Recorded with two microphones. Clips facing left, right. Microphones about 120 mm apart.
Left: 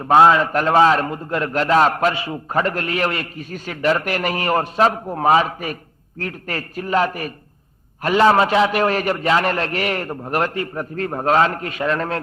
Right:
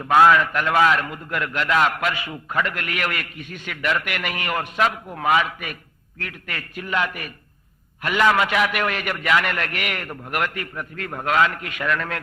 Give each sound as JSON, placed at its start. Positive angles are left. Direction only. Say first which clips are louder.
{"t": 0.0, "sound": "a man's voice", "louder": "left 3 dB", "side_deg": 30}